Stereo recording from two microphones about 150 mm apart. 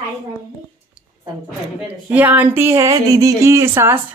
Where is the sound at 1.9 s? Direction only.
10° right (ahead or behind).